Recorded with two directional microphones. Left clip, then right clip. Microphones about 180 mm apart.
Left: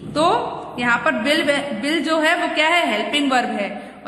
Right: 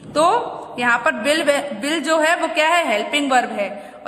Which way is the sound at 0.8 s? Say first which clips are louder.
Right 1 dB; 25° right (ahead or behind).